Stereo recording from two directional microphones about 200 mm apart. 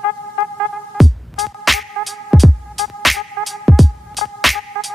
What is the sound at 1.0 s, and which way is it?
Music, centre (ahead or behind).